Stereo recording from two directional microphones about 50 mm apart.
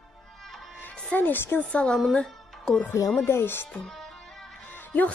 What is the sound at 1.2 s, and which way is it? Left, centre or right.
Speech, left.